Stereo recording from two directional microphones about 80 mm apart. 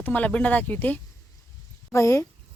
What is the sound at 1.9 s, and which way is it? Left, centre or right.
Speech, left.